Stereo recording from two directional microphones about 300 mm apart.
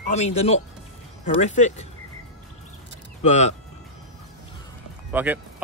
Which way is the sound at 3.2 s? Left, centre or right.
Left.